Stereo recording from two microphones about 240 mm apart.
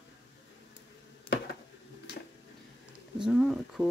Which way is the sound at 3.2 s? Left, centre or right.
Centre.